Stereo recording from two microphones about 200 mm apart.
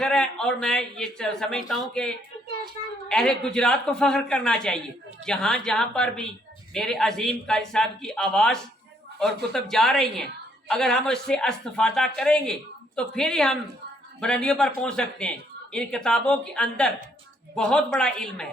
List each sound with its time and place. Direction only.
0.0 s speech: 5° left (ahead or behind)